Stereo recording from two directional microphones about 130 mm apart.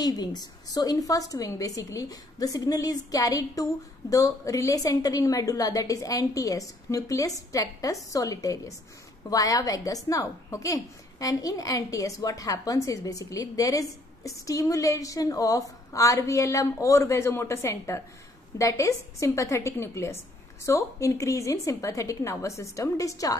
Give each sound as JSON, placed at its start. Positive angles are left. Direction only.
{"t": 0.0, "sound": "a woman's voice", "side_deg": 30}